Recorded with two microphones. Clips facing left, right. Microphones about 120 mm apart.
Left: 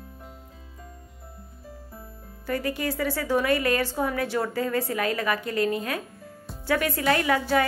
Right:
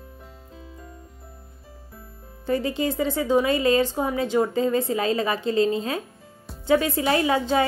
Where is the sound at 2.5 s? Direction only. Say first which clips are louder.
Right 4 dB; 25° right (ahead or behind).